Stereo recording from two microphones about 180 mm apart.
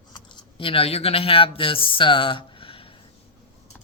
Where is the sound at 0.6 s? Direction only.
30° left (ahead or behind).